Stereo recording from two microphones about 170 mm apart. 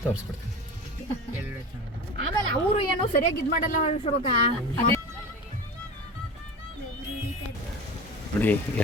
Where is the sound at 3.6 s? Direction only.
45° left (ahead or behind).